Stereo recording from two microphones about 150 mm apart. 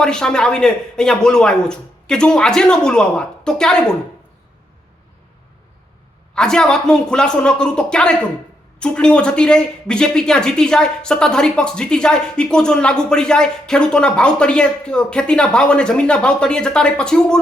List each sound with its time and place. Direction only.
0.0 s speech: 5° left (ahead or behind)
6.3 s speech: 5° left (ahead or behind)